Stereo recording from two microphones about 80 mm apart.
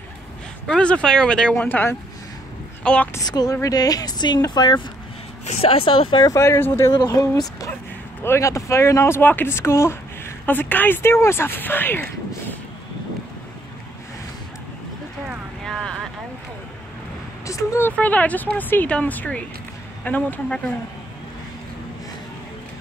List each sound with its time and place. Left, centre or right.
0.7 s speech: centre
1.6 s speech: left
2.8 s a woman's voice: centre
3.3 s a woman's voice: left
5.9 s speech: left
6.2 s speech: left
7.1 s speech: left
9.2 s a woman's voice: left
10.4 s speech: left
15.6 s vehicle: centre
17.5 s speech: left
17.8 s speech: centre